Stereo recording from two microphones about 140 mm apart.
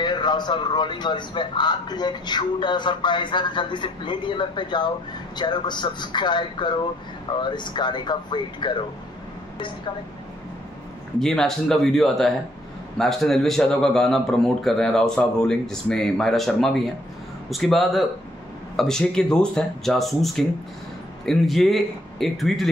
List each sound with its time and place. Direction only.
0.0 s speech: 30° left (ahead or behind)
11.1 s a man's voice: 5° left (ahead or behind)